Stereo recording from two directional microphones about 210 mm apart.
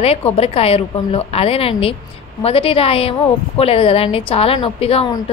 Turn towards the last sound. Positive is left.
turn(degrees=30)  # may be behind; listen again after turning